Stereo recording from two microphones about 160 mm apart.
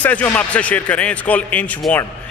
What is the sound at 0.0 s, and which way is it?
Speech, 10° left (ahead or behind).